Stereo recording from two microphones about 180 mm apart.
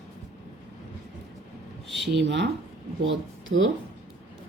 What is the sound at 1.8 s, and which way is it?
Speech, centre (ahead or behind).